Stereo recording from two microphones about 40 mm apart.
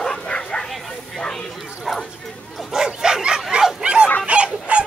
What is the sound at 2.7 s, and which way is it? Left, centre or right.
Bow-wow, centre.